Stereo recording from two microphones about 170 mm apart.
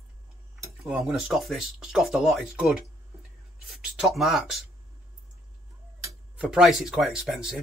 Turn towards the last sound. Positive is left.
turn(degrees=-5)  # may be behind; listen again after turning